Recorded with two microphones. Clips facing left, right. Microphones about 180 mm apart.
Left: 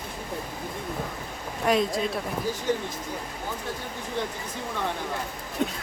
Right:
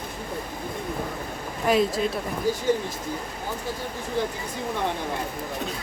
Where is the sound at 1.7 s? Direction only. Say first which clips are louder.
Right 2 dB; centre (ahead or behind).